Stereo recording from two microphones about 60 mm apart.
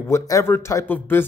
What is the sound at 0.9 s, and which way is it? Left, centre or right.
Speech, left.